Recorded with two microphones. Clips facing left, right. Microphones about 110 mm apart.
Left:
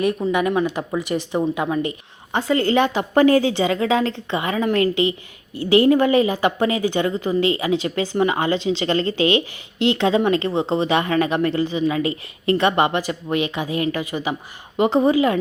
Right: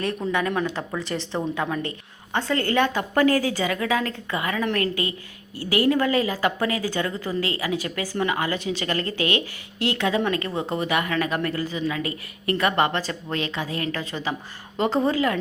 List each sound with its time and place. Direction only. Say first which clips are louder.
0.0 s a woman's voice: left 5 dB; 10° left (ahead or behind)